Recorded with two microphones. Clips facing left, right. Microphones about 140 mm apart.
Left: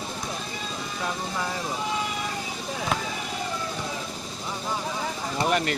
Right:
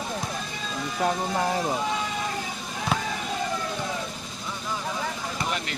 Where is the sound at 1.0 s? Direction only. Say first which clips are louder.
Right 6 dB; 45° right (ahead or behind).